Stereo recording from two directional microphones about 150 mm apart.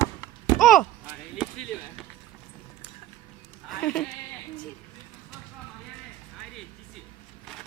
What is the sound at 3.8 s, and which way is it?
Sheep, 5° left (ahead or behind).